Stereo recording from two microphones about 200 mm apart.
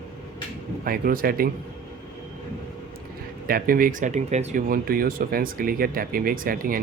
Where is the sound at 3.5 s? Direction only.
45° right (ahead or behind).